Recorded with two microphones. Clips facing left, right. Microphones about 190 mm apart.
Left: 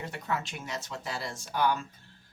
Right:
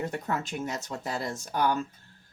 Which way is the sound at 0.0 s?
45° right (ahead or behind).